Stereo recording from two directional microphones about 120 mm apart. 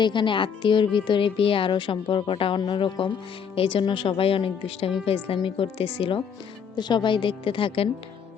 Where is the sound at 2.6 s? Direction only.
35° left (ahead or behind).